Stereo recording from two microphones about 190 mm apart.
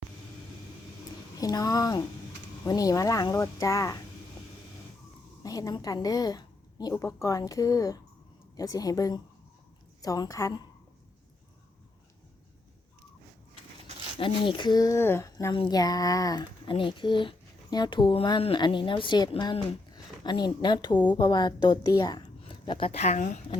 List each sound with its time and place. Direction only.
1.4 s speech: 20° left (ahead or behind)
5.4 s a woman's voice: 20° left (ahead or behind)
14.2 s speech: 25° left (ahead or behind)